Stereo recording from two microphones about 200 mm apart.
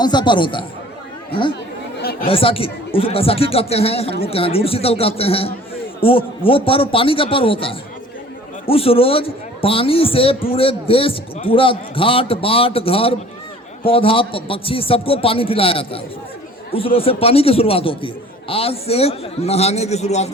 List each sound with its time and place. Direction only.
0.0 s a man's voice: 20° left (ahead or behind)
2.2 s a man's voice: 25° left (ahead or behind)